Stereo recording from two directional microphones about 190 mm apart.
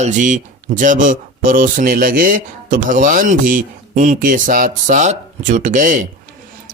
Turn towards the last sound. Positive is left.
turn(degrees=-45)  # may be behind; listen again after turning